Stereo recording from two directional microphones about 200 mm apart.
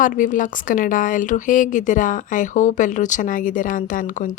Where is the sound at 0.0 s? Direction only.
40° left (ahead or behind).